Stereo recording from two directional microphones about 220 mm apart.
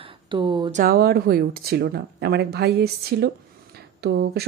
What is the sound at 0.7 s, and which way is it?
Speech, 40° right (ahead or behind).